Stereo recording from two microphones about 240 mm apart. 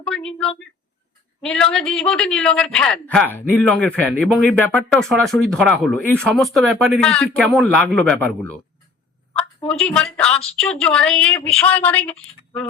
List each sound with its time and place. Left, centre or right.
0.0 s a sound: centre
1.4 s a man's voice: centre
9.6 s a man's voice: centre